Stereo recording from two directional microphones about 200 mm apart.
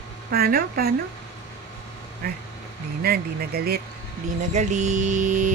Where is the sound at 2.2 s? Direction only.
50° right (ahead or behind).